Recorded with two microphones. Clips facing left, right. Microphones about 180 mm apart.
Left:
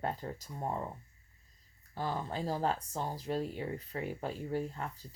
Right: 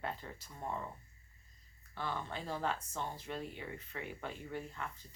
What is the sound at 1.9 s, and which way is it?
Speech, 40° left (ahead or behind).